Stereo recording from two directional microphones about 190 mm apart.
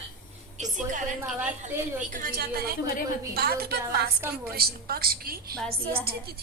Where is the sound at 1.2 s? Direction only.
10° right (ahead or behind).